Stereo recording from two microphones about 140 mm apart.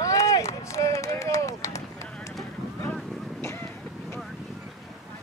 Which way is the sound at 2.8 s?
15° left (ahead or behind).